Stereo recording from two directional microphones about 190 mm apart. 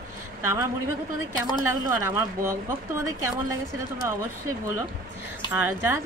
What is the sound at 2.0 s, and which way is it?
Speech, 15° right (ahead or behind).